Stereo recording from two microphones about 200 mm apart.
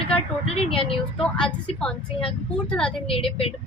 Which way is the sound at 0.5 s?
30° left (ahead or behind).